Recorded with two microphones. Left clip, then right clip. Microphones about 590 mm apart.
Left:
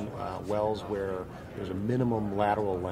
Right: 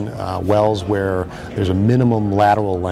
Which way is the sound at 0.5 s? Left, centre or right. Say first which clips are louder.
Right 14 dB; right.